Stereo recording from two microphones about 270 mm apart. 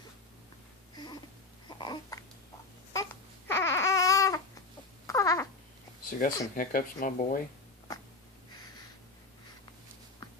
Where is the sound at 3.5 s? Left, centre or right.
Centre.